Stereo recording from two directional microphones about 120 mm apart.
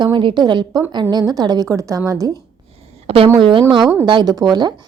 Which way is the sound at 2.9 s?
55° right (ahead or behind).